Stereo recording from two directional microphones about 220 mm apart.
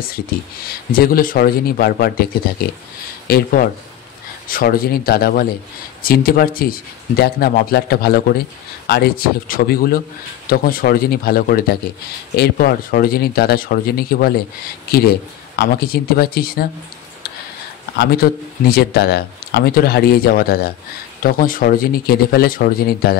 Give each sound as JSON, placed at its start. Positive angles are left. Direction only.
{"t": 0.9, "sound": "speech", "side_deg": 40}
{"t": 17.9, "sound": "speech", "side_deg": 45}